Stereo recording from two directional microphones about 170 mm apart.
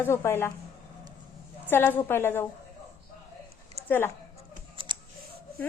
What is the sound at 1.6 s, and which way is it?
Speech, 10° left (ahead or behind).